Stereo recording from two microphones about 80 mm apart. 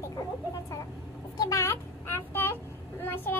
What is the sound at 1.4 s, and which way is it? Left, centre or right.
Child singing, left.